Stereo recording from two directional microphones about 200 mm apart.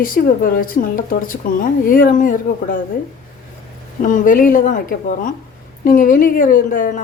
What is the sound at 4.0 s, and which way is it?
A woman's voice, 40° left (ahead or behind).